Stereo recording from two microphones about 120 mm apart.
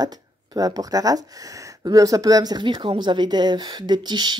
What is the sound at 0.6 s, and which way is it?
Speech, 30° right (ahead or behind).